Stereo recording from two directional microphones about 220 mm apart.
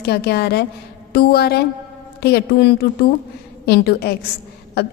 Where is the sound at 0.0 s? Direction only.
45° left (ahead or behind).